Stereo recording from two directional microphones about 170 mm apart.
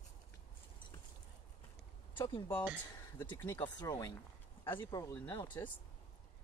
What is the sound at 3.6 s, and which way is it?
Speech, 20° left (ahead or behind).